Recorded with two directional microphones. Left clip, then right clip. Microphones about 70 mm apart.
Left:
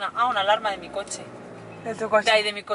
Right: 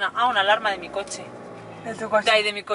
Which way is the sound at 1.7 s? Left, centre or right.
Centre.